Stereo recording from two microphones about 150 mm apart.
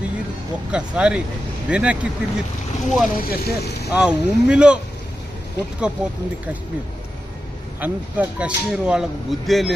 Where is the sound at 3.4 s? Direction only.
90° left.